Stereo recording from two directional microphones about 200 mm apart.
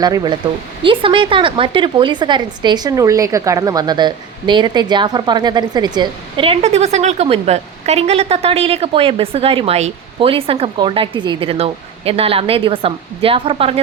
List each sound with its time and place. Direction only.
0.0 s a woman's voice: 20° right (ahead or behind)